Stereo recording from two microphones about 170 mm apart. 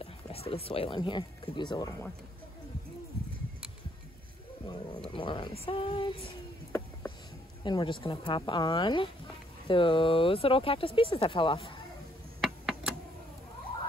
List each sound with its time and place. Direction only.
0.0 s speech: 35° left (ahead or behind)
5.1 s speech: 30° left (ahead or behind)
7.6 s speech: 30° left (ahead or behind)
12.4 s a sound: centre (ahead or behind)